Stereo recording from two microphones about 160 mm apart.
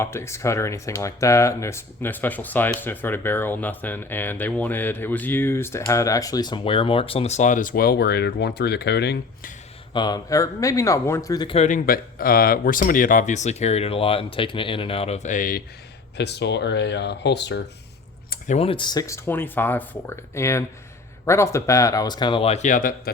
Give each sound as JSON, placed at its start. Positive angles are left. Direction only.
{"t": 0.0, "sound": "speech", "side_deg": 15}
{"t": 9.9, "sound": "speech", "side_deg": 25}
{"t": 11.5, "sound": "speech", "side_deg": 45}
{"t": 11.9, "sound": "speech", "side_deg": 65}
{"t": 16.1, "sound": "speech", "side_deg": 90}
{"t": 18.5, "sound": "speech", "side_deg": 35}